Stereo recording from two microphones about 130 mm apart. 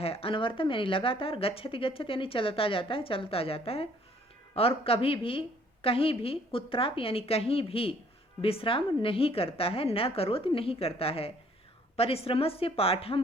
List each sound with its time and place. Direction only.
0.0 s speech: 50° left (ahead or behind)